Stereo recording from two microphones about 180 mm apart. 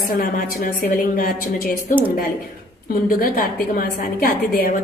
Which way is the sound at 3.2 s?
55° left (ahead or behind).